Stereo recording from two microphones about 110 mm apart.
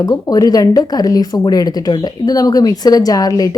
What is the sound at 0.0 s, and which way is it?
A woman's voice, 35° left (ahead or behind).